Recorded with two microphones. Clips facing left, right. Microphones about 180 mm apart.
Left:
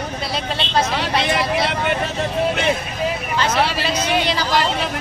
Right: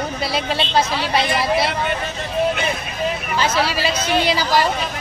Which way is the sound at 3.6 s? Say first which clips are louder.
Even; 5° right (ahead or behind).